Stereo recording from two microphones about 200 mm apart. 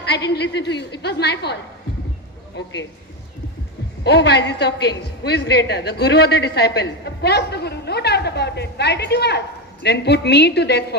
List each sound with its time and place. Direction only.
0.1 s a woman's voice: 60° left (ahead or behind)
2.6 s a woman's voice: 60° left (ahead or behind)
4.0 s a woman's voice: 55° left (ahead or behind)